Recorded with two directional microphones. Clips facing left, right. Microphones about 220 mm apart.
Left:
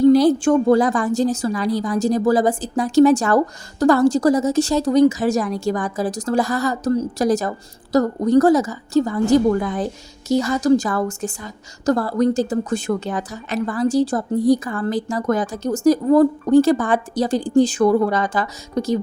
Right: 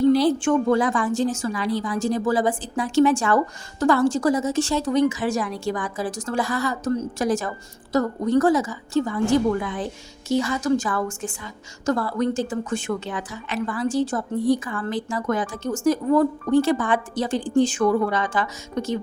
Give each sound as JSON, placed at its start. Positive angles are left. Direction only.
{"t": 0.1, "sound": "a woman's voice", "side_deg": 40}